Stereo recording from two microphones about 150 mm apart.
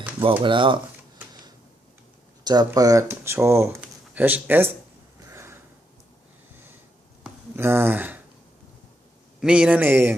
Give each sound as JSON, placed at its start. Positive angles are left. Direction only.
{"t": 0.2, "sound": "speech", "side_deg": -35}
{"t": 2.4, "sound": "a sound", "side_deg": -25}
{"t": 2.6, "sound": "speech", "side_deg": -25}
{"t": 5.3, "sound": "a sound", "side_deg": -15}
{"t": 7.5, "sound": "speech", "side_deg": -15}
{"t": 9.4, "sound": "speech", "side_deg": -5}